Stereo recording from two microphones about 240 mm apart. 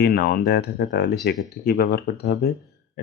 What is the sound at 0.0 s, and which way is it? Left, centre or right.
Speech, left.